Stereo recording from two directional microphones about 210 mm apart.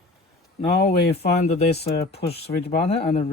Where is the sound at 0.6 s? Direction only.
30° left (ahead or behind).